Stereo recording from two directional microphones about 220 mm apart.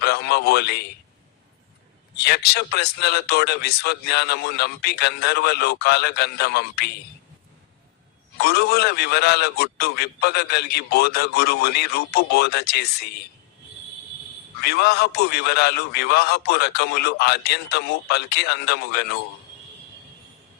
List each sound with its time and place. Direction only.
0.0 s radio: 45° left (ahead or behind)
2.1 s speech: 50° left (ahead or behind)
8.4 s speech: 45° left (ahead or behind)
14.6 s speech: 45° left (ahead or behind)